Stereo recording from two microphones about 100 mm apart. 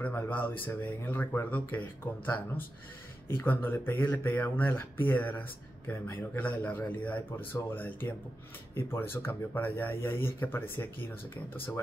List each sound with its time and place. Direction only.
0.0 s speech: 15° left (ahead or behind)